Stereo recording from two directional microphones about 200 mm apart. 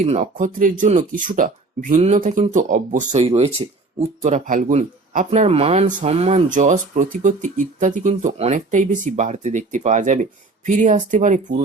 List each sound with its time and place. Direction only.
0.0 s speech: 35° right (ahead or behind)